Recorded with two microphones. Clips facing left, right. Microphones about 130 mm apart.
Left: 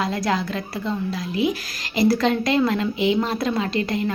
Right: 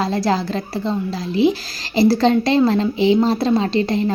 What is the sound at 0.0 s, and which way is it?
Speech, 30° right (ahead or behind).